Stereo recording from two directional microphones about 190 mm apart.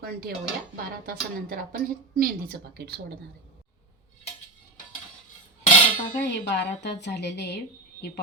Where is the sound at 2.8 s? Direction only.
60° right (ahead or behind).